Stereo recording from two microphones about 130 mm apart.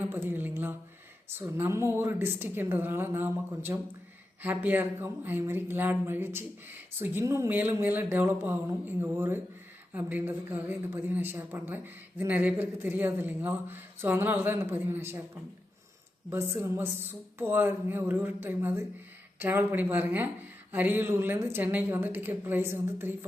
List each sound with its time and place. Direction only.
0.0 s a woman's voice: 15° right (ahead or behind)
16.3 s a woman's voice: 15° right (ahead or behind)